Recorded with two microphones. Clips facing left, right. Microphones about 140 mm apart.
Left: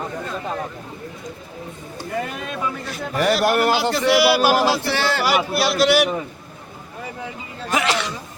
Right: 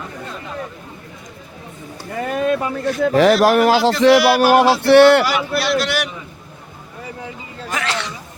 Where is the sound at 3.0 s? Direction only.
90° right.